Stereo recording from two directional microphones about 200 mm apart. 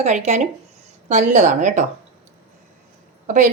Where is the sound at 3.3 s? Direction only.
40° right (ahead or behind).